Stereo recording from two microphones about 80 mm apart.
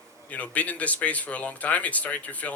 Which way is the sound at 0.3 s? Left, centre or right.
Centre.